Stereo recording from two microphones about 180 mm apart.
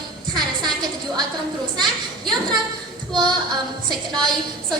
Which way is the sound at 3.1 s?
25° right (ahead or behind).